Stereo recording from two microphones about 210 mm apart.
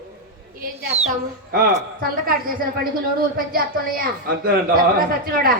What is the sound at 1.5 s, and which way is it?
A man's voice, 45° right (ahead or behind).